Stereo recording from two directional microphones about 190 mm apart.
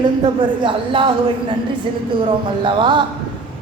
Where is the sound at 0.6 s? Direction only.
25° right (ahead or behind).